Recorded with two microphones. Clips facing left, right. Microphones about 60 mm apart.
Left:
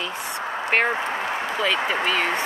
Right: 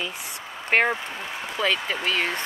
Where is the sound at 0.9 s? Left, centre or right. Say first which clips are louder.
Left 7 dB; left.